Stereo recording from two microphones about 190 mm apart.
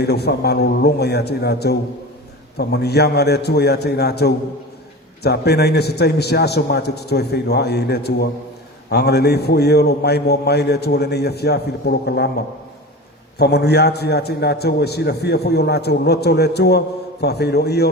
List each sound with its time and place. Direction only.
0.0 s a man's voice: 60° left (ahead or behind)
13.4 s a man's voice: 60° left (ahead or behind)